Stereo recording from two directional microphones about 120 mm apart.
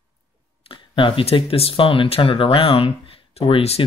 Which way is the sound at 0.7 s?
45° left (ahead or behind).